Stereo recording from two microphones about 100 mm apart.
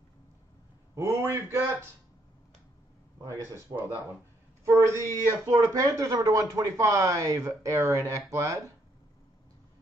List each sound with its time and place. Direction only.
0.9 s a man's voice: 30° right (ahead or behind)
3.2 s a man's voice: 30° right (ahead or behind)
3.7 s a man's voice: 20° right (ahead or behind)
4.6 s speech: 30° right (ahead or behind)